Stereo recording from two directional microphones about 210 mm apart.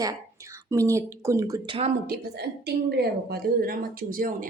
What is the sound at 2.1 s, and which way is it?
A woman's voice, 50° right (ahead or behind).